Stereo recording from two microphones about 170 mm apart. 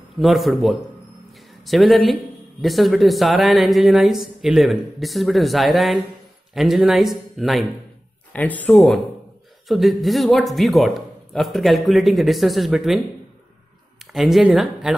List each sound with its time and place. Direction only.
0.2 s speech: centre (ahead or behind)
14.1 s speech: centre (ahead or behind)